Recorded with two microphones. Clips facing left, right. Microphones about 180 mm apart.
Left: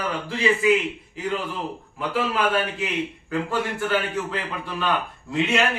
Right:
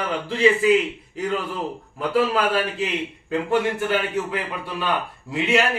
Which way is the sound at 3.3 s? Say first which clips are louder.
Right 6 dB; 20° right (ahead or behind).